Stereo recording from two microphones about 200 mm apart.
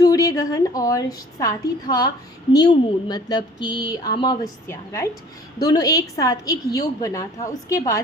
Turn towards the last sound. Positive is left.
turn(degrees=15)  # may be behind; listen again after turning